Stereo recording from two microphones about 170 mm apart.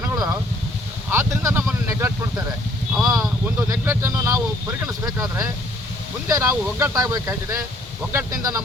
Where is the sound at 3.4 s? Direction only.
15° right (ahead or behind).